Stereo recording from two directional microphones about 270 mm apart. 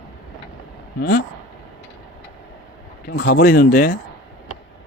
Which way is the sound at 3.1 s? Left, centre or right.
Left.